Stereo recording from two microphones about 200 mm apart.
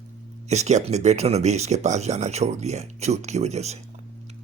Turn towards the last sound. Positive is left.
turn(degrees=-35)  # may be behind; listen again after turning